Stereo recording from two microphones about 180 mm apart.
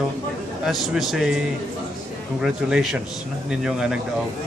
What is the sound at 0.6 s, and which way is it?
Speech, centre (ahead or behind).